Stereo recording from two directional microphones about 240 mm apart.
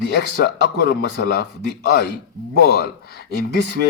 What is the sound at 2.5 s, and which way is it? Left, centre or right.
Speech, left.